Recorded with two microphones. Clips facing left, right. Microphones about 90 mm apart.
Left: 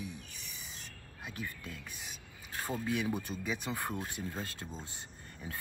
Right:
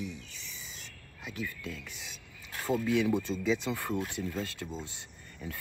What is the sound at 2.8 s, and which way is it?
Speech, 20° left (ahead or behind).